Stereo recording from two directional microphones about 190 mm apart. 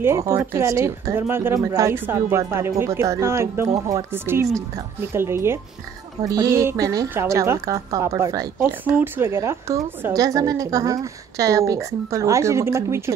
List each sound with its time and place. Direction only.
0.0 s a woman's voice: 15° right (ahead or behind)